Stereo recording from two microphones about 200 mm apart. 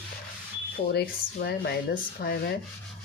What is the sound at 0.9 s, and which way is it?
Speech, 55° left (ahead or behind).